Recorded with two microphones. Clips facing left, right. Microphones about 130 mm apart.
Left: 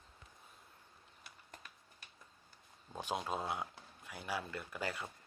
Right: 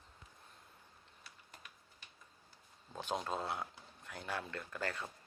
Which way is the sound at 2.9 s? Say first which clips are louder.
Even; 15° left (ahead or behind).